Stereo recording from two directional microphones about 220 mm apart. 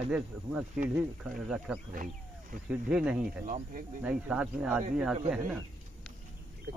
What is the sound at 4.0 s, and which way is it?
Speech, 5° right (ahead or behind).